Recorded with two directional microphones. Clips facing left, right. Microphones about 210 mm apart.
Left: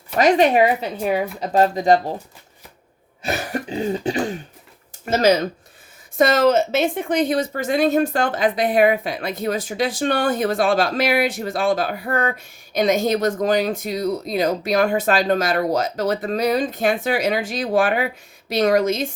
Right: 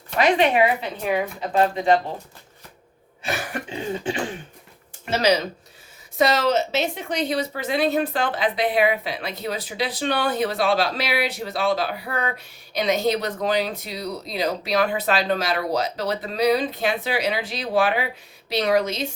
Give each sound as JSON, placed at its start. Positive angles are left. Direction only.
{"t": 0.2, "sound": "speech", "side_deg": 40}
{"t": 3.2, "sound": "throat clearing", "side_deg": 35}
{"t": 5.0, "sound": "speech", "side_deg": 45}